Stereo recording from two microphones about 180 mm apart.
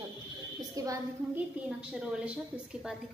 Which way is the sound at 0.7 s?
20° right (ahead or behind).